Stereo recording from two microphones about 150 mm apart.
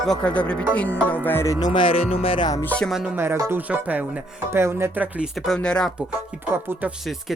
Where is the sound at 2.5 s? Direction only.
15° left (ahead or behind).